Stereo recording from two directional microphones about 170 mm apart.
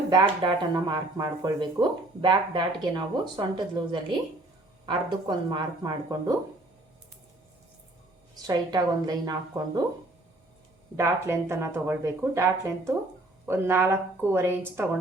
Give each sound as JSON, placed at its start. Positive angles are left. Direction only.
{"t": 0.1, "sound": "speech", "side_deg": -25}
{"t": 4.9, "sound": "speech", "side_deg": -25}
{"t": 8.4, "sound": "speech", "side_deg": -25}
{"t": 10.9, "sound": "speech", "side_deg": -15}